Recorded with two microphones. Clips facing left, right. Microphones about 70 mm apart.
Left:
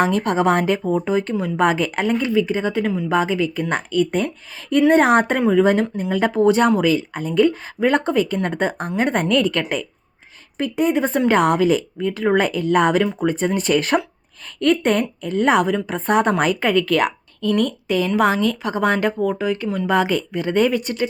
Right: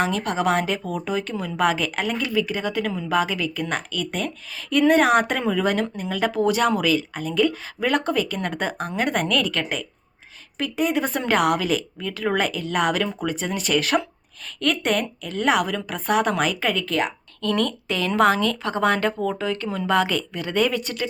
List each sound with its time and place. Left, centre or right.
0.0 s a woman's voice: left
1.6 s a woman's voice: left
5.4 s a woman's voice: centre; by 9.8 s left
10.6 s a woman's voice: left
12.5 s speech: left
13.0 s a woman's voice: left
13.2 s speech: left
16.8 s speech: left
17.4 s speech: centre
19.6 s speech: centre
19.9 s a woman's voice: left